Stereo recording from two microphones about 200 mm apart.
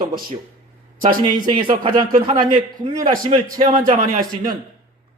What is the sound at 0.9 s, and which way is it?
Speech, 45° right (ahead or behind).